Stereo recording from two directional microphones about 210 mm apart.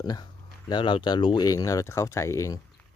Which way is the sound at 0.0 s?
20° left (ahead or behind).